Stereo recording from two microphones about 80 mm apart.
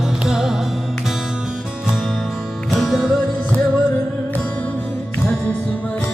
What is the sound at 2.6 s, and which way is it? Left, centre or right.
Music, centre.